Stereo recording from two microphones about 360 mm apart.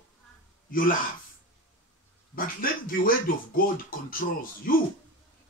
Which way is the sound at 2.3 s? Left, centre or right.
Left.